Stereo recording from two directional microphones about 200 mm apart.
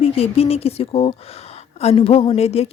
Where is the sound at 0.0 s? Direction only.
30° left (ahead or behind).